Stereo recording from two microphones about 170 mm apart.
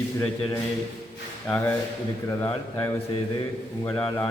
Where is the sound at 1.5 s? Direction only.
5° left (ahead or behind).